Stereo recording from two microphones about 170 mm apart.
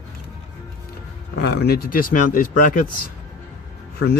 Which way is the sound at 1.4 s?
70° left (ahead or behind).